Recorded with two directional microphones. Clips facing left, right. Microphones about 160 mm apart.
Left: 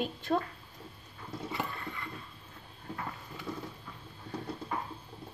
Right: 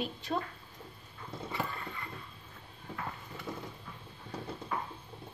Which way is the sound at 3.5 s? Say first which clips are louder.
Left 2 dB; 25° right (ahead or behind).